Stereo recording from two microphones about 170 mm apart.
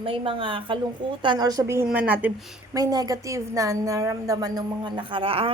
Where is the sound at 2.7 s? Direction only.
20° right (ahead or behind).